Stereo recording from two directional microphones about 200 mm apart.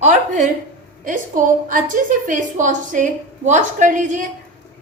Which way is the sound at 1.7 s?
40° right (ahead or behind).